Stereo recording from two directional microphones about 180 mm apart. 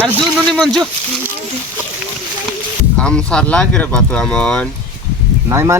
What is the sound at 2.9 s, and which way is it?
Speech, 5° left (ahead or behind).